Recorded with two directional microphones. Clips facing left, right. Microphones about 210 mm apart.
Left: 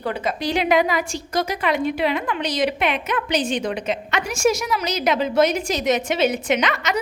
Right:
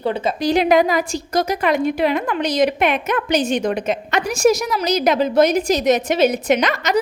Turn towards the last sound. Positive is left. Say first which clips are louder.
# right 4 dB
turn(degrees=-40)  # may be behind; listen again after turning